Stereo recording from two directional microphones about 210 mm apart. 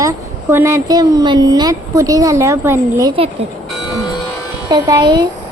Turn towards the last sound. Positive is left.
turn(degrees=-15)  # may be behind; listen again after turning